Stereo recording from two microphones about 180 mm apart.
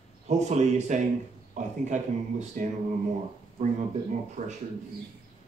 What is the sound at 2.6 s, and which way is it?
Speech, 50° right (ahead or behind).